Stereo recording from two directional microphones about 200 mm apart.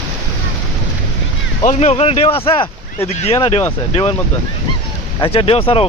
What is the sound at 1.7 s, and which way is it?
Speech, 35° left (ahead or behind).